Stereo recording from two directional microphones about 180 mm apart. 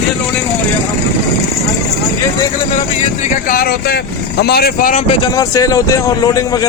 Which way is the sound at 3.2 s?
50° left (ahead or behind).